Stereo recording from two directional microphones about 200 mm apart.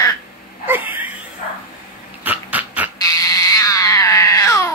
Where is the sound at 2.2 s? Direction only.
10° right (ahead or behind).